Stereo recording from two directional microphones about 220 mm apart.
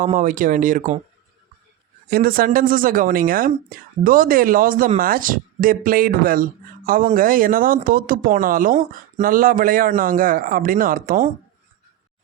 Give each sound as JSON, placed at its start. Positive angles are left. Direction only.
{"t": 0.2, "sound": "speech", "side_deg": -40}
{"t": 2.0, "sound": "speech", "side_deg": -40}